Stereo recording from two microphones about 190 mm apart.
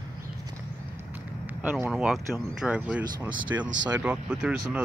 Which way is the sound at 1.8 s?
5° right (ahead or behind).